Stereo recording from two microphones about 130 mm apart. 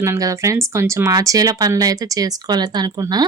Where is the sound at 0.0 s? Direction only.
25° right (ahead or behind).